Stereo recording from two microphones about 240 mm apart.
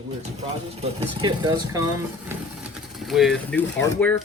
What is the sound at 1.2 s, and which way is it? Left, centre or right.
Speech, centre.